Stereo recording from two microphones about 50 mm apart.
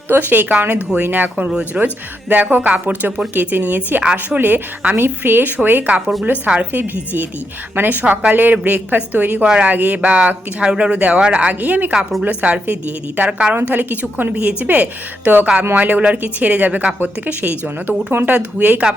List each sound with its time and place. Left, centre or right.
0.1 s speech: right
1.5 s speech: centre
2.3 s speech: right
4.0 s speech: right
4.4 s speech: right
4.9 s a woman's voice: right
6.4 s speech: right
7.8 s speech: right
13.6 s speech: right
17.8 s a woman's voice: right
18.3 s speech: right